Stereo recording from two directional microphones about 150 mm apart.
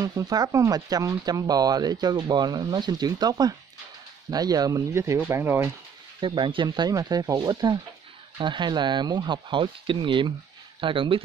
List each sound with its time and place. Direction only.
0.0 s speech: 25° right (ahead or behind)
6.2 s speech: 30° right (ahead or behind)